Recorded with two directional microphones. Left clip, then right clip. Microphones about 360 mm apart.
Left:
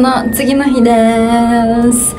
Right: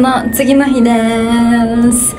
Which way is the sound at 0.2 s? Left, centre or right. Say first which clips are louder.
Right 2 dB; centre.